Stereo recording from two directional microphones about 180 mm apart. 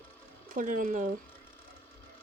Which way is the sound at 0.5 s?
45° right (ahead or behind).